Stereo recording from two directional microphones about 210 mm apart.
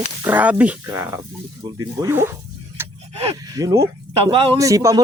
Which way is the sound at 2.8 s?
10° right (ahead or behind).